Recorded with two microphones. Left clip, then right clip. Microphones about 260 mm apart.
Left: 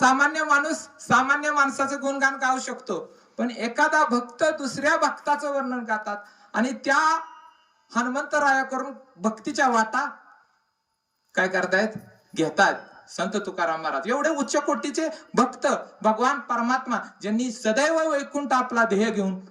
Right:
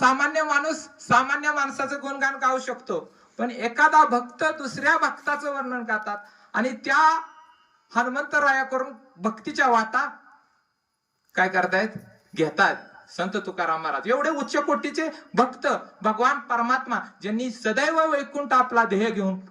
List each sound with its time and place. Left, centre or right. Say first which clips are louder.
0.0 s speech: left 1 dB; centre
11.3 s speech: right 1 dB; centre